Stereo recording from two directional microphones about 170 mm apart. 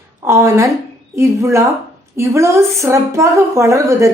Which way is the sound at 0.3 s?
15° right (ahead or behind).